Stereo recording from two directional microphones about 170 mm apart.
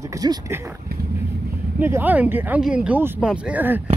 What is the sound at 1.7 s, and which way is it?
Speech, 10° right (ahead or behind).